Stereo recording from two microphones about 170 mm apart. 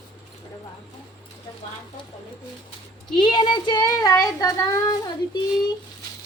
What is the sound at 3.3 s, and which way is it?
Speech, 25° left (ahead or behind).